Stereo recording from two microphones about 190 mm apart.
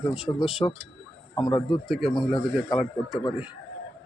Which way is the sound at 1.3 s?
25° left (ahead or behind).